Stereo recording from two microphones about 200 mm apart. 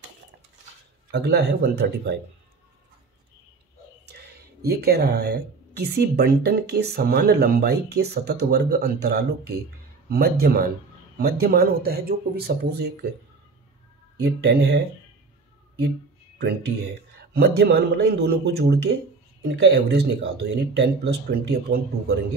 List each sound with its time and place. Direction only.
1.1 s speech: 55° right (ahead or behind)
4.0 s speech: 55° right (ahead or behind)
14.2 s speech: 55° right (ahead or behind)
16.3 s speech: 55° right (ahead or behind)